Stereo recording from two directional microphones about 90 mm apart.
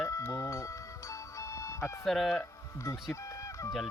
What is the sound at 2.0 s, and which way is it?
Speech, centre (ahead or behind).